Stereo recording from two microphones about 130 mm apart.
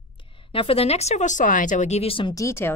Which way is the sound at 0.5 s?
45° left (ahead or behind).